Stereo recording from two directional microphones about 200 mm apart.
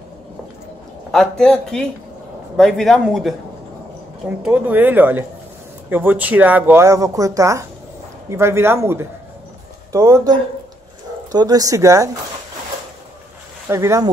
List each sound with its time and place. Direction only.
1.1 s speech: 5° left (ahead or behind); by 12.1 s 15° right (ahead or behind)
13.7 s speech: 15° right (ahead or behind)